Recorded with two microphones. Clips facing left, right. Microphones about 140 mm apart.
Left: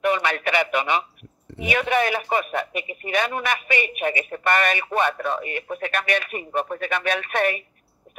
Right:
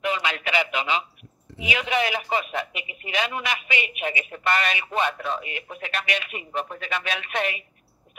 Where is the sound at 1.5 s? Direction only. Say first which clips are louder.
Left 4 dB; 55° left (ahead or behind).